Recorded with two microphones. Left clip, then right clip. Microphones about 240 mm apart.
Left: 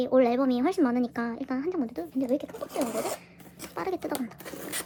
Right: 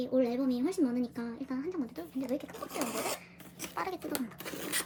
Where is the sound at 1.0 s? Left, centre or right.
Centre.